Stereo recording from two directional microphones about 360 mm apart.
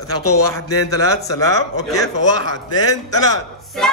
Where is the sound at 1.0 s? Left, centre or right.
Centre.